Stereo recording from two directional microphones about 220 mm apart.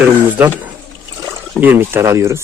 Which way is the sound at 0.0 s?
5° right (ahead or behind).